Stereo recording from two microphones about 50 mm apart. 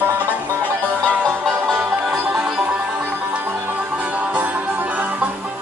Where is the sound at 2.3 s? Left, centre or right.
Centre.